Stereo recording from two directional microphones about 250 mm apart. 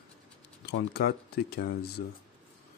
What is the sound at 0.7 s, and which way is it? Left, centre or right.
Speech, left.